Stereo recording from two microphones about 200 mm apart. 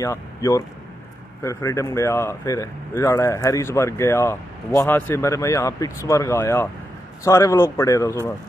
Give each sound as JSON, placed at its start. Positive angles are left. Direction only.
{"t": 0.0, "sound": "speech", "side_deg": 15}